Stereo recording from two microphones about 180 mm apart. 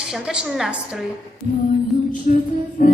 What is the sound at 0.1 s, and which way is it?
Speech, 5° right (ahead or behind).